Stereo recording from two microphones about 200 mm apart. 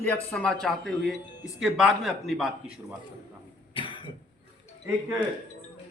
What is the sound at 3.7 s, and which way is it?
Cough, 25° left (ahead or behind).